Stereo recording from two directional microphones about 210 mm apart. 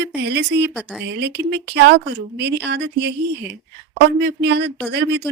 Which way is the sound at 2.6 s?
55° right (ahead or behind).